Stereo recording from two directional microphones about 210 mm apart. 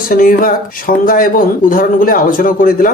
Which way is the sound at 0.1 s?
40° left (ahead or behind).